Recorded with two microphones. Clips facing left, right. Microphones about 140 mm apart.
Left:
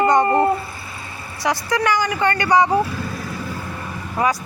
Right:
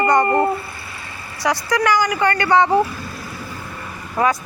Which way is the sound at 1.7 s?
20° left (ahead or behind).